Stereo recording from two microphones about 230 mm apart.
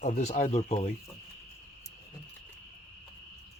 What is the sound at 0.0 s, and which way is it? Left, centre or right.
Speech, left.